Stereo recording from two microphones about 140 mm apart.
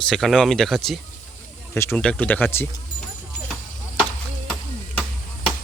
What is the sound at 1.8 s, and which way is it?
Speech, 10° left (ahead or behind).